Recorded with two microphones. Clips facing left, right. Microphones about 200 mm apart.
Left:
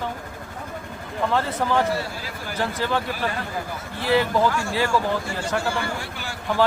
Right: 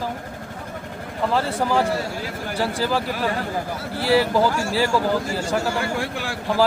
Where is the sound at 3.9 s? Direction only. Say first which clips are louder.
Right 2 dB; 35° right (ahead or behind).